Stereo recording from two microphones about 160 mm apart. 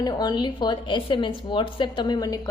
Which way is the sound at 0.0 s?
25° left (ahead or behind).